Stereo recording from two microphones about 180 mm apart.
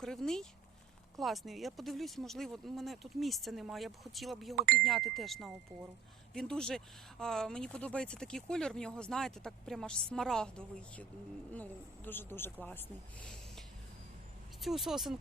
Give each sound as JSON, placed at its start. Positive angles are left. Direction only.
{"t": 0.0, "sound": "speech", "side_deg": 5}
{"t": 4.5, "sound": "speech", "side_deg": -55}
{"t": 4.8, "sound": "speech", "side_deg": 0}
{"t": 14.6, "sound": "speech", "side_deg": 0}